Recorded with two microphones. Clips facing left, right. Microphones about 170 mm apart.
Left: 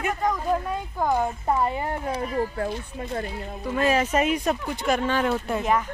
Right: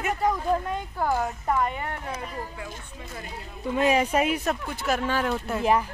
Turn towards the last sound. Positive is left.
turn(degrees=-30)  # may be behind; listen again after turning